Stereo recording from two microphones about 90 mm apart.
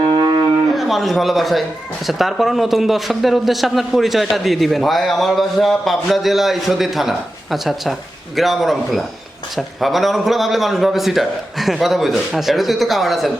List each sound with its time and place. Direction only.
0.0 s cattle: 60° right (ahead or behind)
0.8 s a man's voice: centre (ahead or behind)